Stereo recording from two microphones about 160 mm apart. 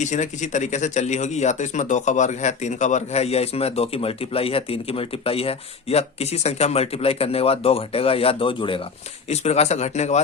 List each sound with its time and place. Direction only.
0.0 s speech: 50° left (ahead or behind); by 8.8 s 30° left (ahead or behind)
9.3 s speech: 45° left (ahead or behind)